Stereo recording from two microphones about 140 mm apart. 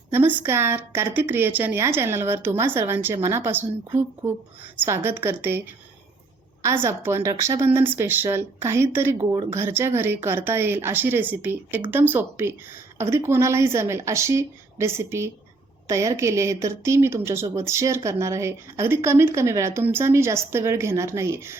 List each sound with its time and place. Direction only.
0.1 s a woman's voice: 15° right (ahead or behind)